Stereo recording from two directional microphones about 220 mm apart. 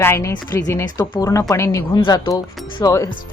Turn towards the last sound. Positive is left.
turn(degrees=15)  # may be behind; listen again after turning